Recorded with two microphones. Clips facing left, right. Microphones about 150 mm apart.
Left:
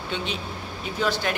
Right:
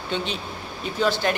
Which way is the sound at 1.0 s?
5° left (ahead or behind).